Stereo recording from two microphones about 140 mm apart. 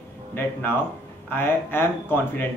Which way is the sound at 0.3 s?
15° left (ahead or behind).